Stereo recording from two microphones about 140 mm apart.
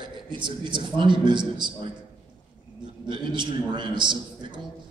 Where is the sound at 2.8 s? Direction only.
35° right (ahead or behind).